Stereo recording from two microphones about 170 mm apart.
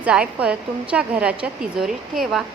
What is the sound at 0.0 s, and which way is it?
A woman's voice, 5° right (ahead or behind).